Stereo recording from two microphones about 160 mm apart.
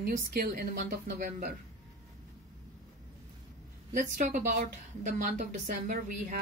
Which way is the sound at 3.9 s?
55° right (ahead or behind).